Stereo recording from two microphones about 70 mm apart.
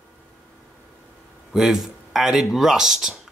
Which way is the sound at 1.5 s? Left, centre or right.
Centre.